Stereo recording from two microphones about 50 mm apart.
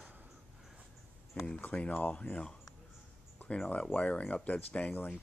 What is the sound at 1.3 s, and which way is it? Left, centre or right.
Speech, left.